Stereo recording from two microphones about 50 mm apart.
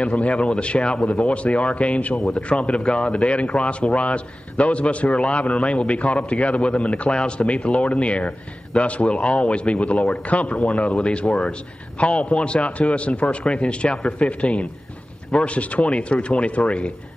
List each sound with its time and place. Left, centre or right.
0.0 s speech: left